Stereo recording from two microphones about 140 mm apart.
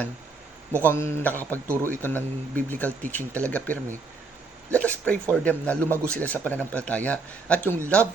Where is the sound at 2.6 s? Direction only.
10° left (ahead or behind).